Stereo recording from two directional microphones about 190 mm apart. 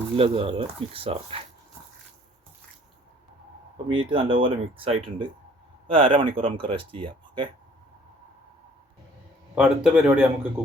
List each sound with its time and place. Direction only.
0.2 s speech: 30° right (ahead or behind)
3.8 s speech: 25° right (ahead or behind)
9.6 s a man's voice: 5° right (ahead or behind)